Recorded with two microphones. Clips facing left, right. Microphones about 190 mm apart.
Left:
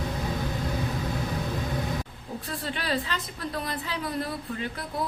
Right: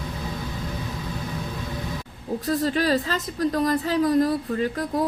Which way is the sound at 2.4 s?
40° right (ahead or behind).